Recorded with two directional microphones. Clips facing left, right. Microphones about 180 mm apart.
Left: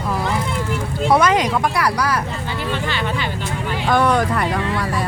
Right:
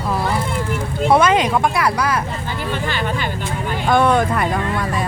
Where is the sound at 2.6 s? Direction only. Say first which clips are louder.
Right 1 dB; 45° right (ahead or behind).